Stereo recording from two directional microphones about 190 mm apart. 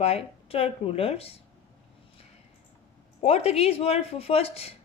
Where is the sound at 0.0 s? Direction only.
30° left (ahead or behind).